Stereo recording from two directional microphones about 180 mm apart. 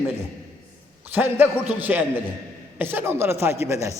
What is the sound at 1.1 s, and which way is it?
A man's voice, 10° right (ahead or behind).